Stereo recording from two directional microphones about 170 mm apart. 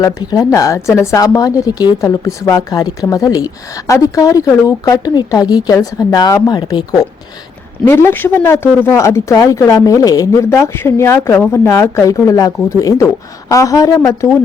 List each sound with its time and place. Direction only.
0.0 s speech: 20° left (ahead or behind)